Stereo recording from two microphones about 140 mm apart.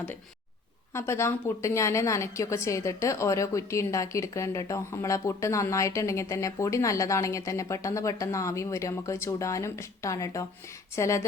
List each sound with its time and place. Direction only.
0.9 s a woman's voice: 20° left (ahead or behind)